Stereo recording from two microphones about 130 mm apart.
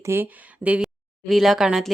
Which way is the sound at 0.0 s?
20° right (ahead or behind).